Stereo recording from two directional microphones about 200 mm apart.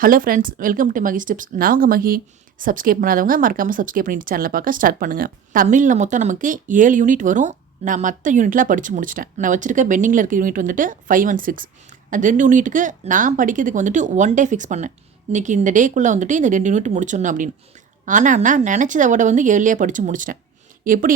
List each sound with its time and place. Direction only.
0.0 s speech: 45° right (ahead or behind)